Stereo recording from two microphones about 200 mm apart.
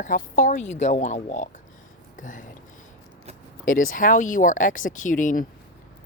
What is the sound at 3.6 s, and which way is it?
Speech, 45° left (ahead or behind).